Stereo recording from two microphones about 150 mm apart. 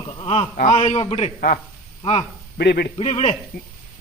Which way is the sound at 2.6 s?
90° left.